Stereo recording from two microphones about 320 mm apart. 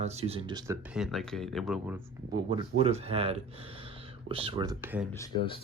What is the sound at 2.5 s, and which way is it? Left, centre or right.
Speech, centre.